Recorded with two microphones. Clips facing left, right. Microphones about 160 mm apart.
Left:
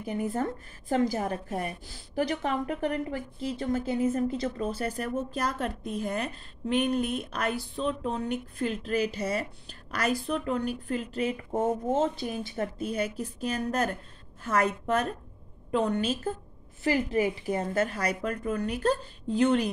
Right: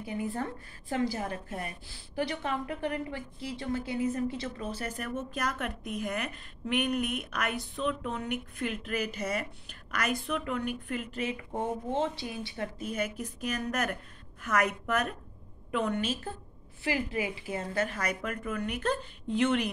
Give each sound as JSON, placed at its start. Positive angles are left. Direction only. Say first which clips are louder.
{"t": 0.0, "sound": "a woman's voice", "louder": "left 4 dB", "side_deg": 45}
{"t": 4.0, "sound": "a woman's voice", "louder": "left 4 dB", "side_deg": 30}